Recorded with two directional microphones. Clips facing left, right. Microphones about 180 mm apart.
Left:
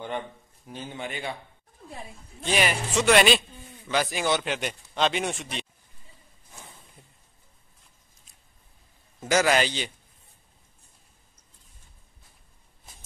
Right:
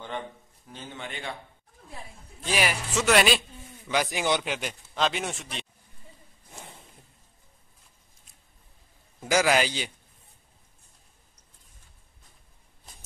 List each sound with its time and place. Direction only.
0.7 s a man's voice: 10° left (ahead or behind)
2.4 s speech: 5° right (ahead or behind)
3.9 s a man's voice: 15° right (ahead or behind)
4.4 s speech: centre (ahead or behind)
9.3 s a man's voice: 10° right (ahead or behind)